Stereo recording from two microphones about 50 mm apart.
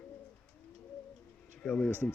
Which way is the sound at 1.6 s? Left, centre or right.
Left.